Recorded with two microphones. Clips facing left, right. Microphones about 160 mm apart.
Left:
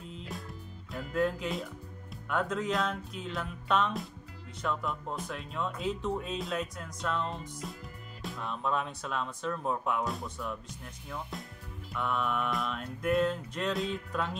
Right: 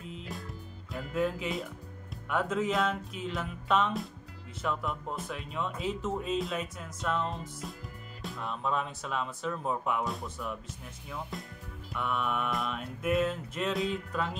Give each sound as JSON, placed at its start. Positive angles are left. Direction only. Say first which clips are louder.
{"t": 0.0, "sound": "music", "louder": "right 1 dB", "side_deg": 0}
{"t": 0.9, "sound": "speech", "louder": "left 1 dB", "side_deg": 0}